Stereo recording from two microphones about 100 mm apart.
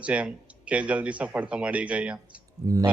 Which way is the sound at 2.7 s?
40° right (ahead or behind).